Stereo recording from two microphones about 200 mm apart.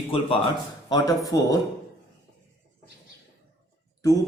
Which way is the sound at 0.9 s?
20° left (ahead or behind).